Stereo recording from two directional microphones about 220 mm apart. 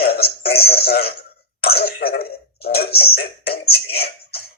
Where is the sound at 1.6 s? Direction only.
45° left (ahead or behind).